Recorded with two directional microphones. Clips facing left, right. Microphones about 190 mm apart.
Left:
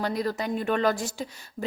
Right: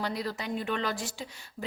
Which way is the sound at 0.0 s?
45° left (ahead or behind).